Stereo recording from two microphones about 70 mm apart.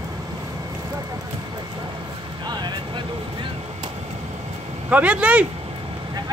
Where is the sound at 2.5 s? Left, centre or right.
Right.